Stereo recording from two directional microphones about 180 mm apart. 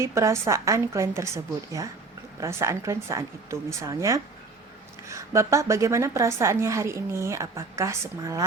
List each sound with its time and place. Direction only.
0.0 s a woman's voice: 15° right (ahead or behind)
2.4 s a woman's voice: 15° right (ahead or behind)